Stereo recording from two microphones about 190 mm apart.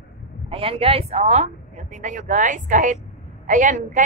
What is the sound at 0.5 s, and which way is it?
A woman's voice, 30° right (ahead or behind).